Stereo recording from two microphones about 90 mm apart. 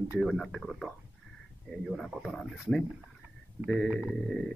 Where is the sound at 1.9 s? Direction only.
Centre (ahead or behind).